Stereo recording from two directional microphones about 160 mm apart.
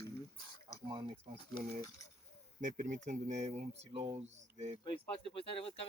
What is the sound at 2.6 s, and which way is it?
Speech, 55° right (ahead or behind).